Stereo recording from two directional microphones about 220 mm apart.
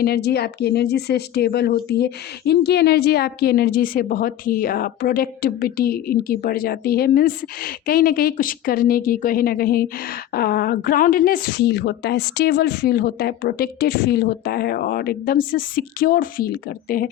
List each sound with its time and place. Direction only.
0.0 s speech: 45° left (ahead or behind)